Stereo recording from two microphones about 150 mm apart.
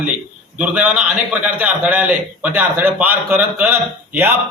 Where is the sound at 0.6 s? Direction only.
10° right (ahead or behind).